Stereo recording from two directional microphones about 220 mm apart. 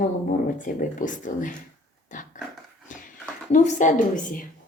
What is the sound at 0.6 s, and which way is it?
Speech, 35° left (ahead or behind).